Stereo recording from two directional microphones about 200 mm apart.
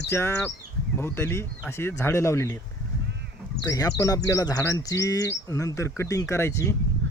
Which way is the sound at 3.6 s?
15° left (ahead or behind).